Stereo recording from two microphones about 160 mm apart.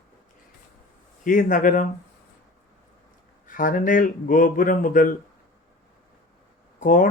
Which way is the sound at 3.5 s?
60° left (ahead or behind).